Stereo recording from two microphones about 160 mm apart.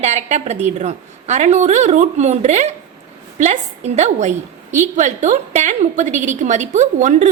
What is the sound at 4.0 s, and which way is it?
A woman's voice, 45° right (ahead or behind).